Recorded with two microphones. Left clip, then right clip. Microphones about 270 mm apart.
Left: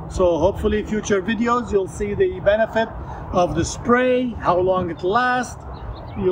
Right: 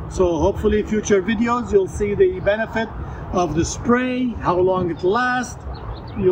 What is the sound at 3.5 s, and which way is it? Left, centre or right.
Speech, left.